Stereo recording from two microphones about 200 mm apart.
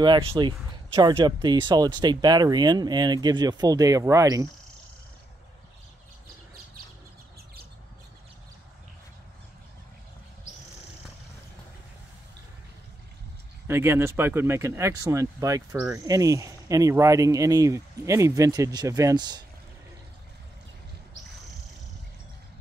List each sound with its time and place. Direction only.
0.0 s speech: 20° right (ahead or behind)
13.7 s speech: 10° right (ahead or behind)